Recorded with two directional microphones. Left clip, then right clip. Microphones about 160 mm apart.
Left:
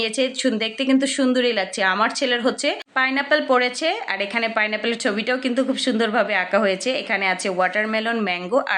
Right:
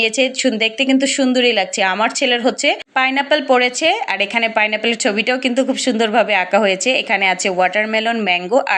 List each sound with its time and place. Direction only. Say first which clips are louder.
0.0 s speech: right 6 dB; 20° right (ahead or behind)